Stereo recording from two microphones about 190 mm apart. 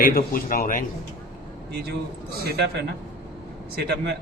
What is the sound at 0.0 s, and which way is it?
Speech, 50° left (ahead or behind).